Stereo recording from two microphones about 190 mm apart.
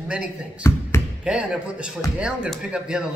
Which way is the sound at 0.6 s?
15° left (ahead or behind).